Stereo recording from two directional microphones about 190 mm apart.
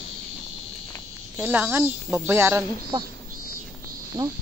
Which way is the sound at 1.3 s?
10° right (ahead or behind).